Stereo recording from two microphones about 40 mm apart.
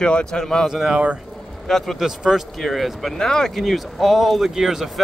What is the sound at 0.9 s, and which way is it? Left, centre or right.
Speech, right.